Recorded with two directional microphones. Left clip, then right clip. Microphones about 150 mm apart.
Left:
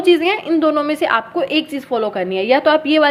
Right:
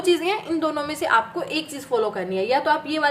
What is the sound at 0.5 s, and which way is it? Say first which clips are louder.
A woman's voice: left 9 dB; 30° left (ahead or behind).